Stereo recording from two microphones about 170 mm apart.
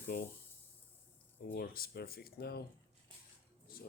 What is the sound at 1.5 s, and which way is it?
Speech, 60° left (ahead or behind).